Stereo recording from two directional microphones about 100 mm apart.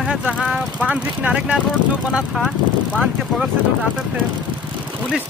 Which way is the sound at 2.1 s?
Centre (ahead or behind).